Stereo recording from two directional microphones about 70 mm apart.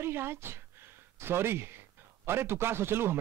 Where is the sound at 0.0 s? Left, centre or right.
Right.